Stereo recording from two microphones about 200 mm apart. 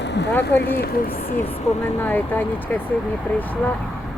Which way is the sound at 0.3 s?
10° left (ahead or behind).